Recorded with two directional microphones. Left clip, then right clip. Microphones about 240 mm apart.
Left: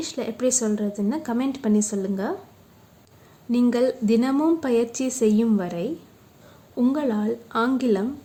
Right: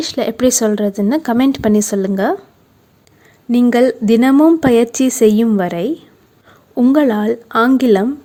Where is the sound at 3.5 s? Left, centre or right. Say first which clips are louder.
Right 9 dB; right.